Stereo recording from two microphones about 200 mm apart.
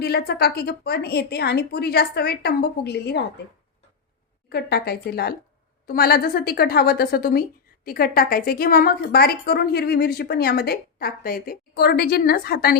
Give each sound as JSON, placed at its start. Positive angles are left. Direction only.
{"t": 0.0, "sound": "a woman's voice", "side_deg": 55}
{"t": 4.4, "sound": "a woman's voice", "side_deg": 55}